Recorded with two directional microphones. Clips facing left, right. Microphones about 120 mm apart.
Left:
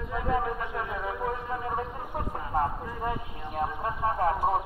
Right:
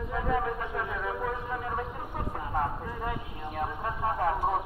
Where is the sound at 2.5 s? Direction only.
30° left (ahead or behind).